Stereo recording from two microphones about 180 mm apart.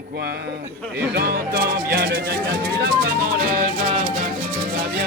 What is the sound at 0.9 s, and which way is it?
Speech, 60° right (ahead or behind).